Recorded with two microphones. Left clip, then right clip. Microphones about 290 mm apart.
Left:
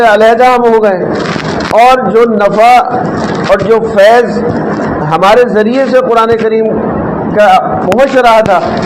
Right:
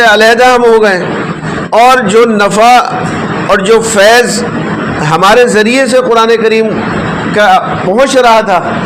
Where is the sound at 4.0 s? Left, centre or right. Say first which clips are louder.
Left 3 dB; right.